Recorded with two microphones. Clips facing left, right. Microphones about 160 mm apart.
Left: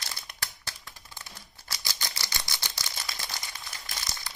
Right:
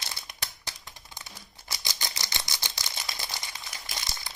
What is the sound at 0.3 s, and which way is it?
Scissors, 20° right (ahead or behind).